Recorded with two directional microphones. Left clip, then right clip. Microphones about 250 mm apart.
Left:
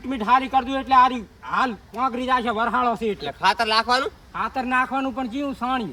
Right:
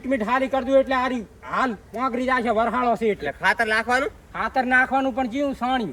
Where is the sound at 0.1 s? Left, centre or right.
Left.